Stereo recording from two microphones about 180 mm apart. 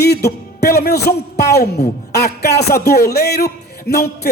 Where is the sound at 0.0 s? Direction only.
65° left (ahead or behind).